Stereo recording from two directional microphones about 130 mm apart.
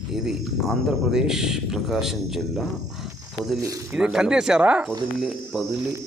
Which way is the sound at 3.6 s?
20° right (ahead or behind).